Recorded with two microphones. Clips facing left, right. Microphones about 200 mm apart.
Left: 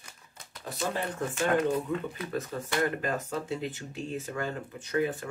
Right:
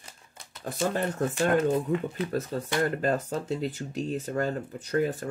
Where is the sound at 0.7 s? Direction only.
50° right (ahead or behind).